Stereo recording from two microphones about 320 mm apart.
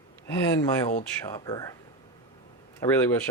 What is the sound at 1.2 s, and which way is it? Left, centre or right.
Speech, centre.